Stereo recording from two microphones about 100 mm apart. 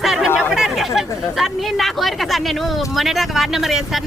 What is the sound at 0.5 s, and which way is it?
Speech, centre (ahead or behind).